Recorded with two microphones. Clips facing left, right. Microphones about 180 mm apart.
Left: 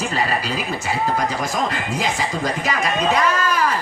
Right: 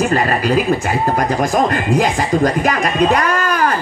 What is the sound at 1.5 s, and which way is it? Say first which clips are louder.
Speech: right 8 dB; 50° right (ahead or behind).